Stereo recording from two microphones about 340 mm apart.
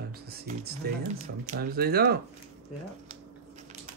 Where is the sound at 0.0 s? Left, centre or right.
Right.